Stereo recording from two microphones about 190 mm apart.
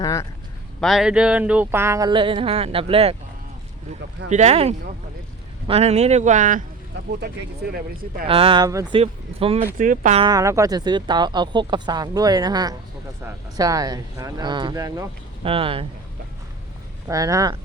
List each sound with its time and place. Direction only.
0.0 s speech: 15° left (ahead or behind)
0.8 s a sound: centre (ahead or behind); by 3.2 s 30° right (ahead or behind)
4.3 s a man's voice: 35° right (ahead or behind)
7.7 s speech: 50° right (ahead or behind)
8.3 s speech: 30° right (ahead or behind)
9.7 s speech: 45° right (ahead or behind)
10.2 s speech: 20° right (ahead or behind)
15.4 s speech: 30° right (ahead or behind)
17.1 s speech: 20° right (ahead or behind)